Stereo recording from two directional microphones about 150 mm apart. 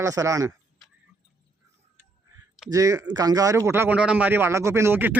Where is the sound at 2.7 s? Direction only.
20° right (ahead or behind).